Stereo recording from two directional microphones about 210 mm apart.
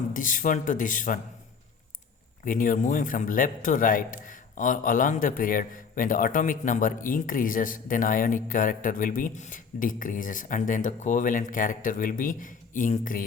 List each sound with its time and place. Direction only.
0.1 s a man's voice: 40° left (ahead or behind)
2.4 s a man's voice: 40° left (ahead or behind)